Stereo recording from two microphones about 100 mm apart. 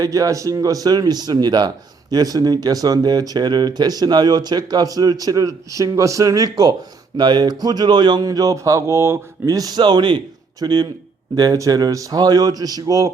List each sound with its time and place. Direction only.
0.0 s speech: 35° right (ahead or behind)